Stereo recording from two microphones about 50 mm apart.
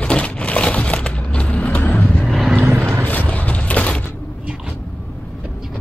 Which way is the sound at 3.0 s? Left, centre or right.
Left.